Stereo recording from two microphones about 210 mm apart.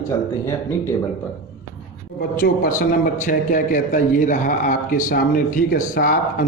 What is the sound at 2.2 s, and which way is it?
A man's voice, 45° left (ahead or behind).